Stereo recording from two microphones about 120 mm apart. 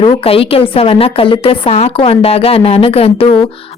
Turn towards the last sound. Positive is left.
turn(degrees=55)  # may be behind; listen again after turning